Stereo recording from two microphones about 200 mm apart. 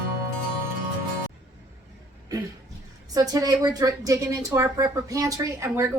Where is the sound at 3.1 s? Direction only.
20° right (ahead or behind).